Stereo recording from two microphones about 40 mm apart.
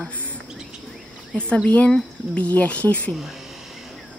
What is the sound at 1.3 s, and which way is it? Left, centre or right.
A woman's voice, left.